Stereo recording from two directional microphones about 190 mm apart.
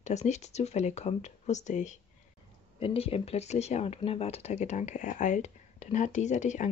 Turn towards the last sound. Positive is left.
turn(degrees=40)  # may be behind; listen again after turning